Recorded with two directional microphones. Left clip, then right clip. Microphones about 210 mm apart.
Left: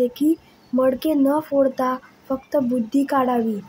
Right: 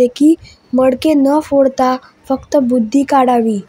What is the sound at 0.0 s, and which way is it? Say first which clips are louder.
A woman's voice: right 9 dB; 30° right (ahead or behind).